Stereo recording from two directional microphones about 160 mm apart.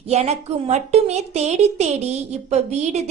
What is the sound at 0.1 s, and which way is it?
A woman's voice, 40° right (ahead or behind).